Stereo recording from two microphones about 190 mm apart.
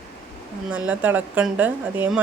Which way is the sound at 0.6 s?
5° right (ahead or behind).